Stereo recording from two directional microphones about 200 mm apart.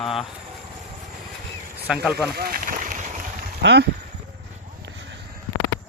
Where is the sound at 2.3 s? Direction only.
45° right (ahead or behind).